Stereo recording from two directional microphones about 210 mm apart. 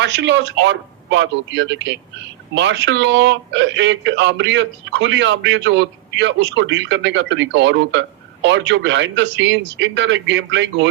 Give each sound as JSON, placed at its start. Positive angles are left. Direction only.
{"t": 0.0, "sound": "speech", "side_deg": -55}